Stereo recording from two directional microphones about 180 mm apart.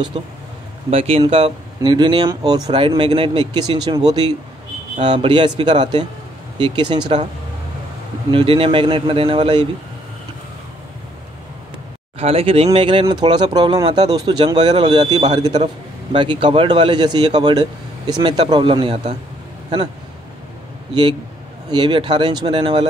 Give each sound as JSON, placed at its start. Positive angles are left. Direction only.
{"t": 0.2, "sound": "a man's voice", "side_deg": -30}
{"t": 5.0, "sound": "a man's voice", "side_deg": -25}
{"t": 8.3, "sound": "a man's voice", "side_deg": -30}
{"t": 12.2, "sound": "a man's voice", "side_deg": -35}
{"t": 21.6, "sound": "a man's voice", "side_deg": -25}